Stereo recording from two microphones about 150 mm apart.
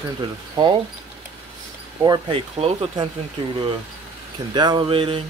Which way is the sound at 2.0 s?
25° right (ahead or behind).